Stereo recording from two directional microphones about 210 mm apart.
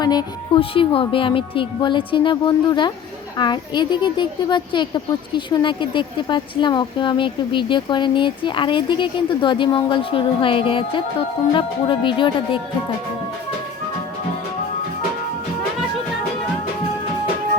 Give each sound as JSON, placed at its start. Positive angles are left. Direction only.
{"t": 0.0, "sound": "a woman's voice", "side_deg": 20}